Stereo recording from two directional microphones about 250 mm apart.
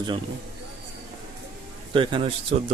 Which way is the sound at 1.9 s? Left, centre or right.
Right.